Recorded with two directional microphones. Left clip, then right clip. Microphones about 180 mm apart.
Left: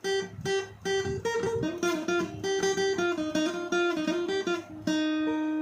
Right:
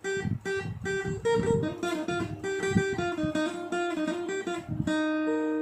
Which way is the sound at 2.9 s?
25° left (ahead or behind).